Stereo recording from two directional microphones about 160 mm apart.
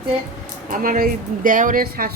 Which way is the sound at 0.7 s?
60° right (ahead or behind).